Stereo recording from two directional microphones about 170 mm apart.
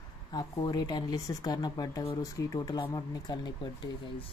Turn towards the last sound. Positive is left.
turn(degrees=25)  # may be behind; listen again after turning